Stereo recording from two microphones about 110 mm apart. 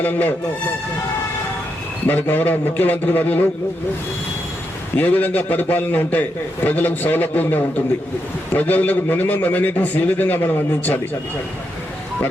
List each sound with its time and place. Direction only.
0.0 s a man's voice: 15° left (ahead or behind)
2.0 s a man's voice: 20° left (ahead or behind)
4.9 s a man's voice: 15° left (ahead or behind)